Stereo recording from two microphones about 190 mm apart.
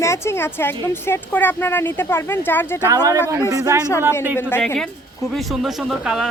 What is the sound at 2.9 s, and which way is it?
Speech, 15° right (ahead or behind).